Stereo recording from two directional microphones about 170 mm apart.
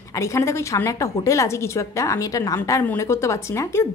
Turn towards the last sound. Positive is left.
turn(degrees=15)  # may be behind; listen again after turning